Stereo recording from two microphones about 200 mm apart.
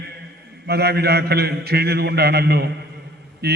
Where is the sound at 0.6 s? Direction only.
55° right (ahead or behind).